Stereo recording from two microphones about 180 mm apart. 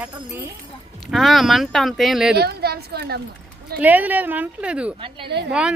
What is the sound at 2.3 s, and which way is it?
Speech, 60° right (ahead or behind).